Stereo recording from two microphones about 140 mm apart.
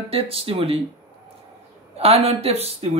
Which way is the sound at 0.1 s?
45° right (ahead or behind).